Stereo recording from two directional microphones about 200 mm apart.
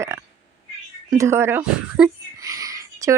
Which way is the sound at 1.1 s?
15° right (ahead or behind).